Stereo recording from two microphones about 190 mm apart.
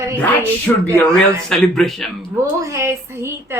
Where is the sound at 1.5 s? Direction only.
Centre (ahead or behind).